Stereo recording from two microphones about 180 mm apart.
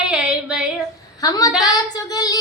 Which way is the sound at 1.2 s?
20° left (ahead or behind).